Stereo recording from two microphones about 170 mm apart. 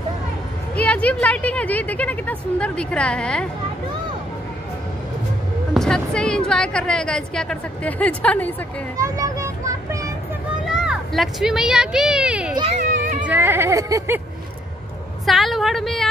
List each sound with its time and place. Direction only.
0.7 s a woman's voice: 10° left (ahead or behind)
5.8 s a woman's voice: 5° left (ahead or behind)
8.9 s children playing: 20° right (ahead or behind)
10.7 s speech: 5° right (ahead or behind)
15.2 s a woman's voice: centre (ahead or behind)